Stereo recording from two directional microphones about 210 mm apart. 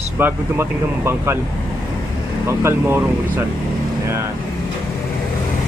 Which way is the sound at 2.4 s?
10° right (ahead or behind).